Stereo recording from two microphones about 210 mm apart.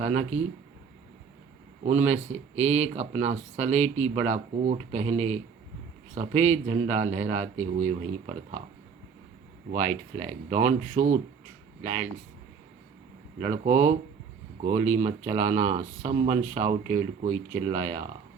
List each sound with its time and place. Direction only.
0.0 s speech: 35° right (ahead or behind)
1.8 s speech: 30° right (ahead or behind)
9.7 s speech: 35° right (ahead or behind)
13.4 s speech: 30° right (ahead or behind)
15.5 s speech: 15° right (ahead or behind)
15.8 s speech: 40° right (ahead or behind)
16.0 s speech: 15° right (ahead or behind)
16.9 s speech: 35° right (ahead or behind)